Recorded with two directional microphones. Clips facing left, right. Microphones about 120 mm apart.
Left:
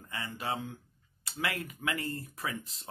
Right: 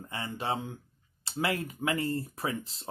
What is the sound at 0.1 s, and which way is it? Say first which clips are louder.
Speech: right 3 dB; 25° right (ahead or behind).